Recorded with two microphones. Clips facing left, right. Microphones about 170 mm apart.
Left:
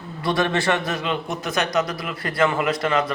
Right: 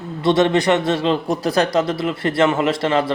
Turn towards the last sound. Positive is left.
turn(degrees=-30)  # may be behind; listen again after turning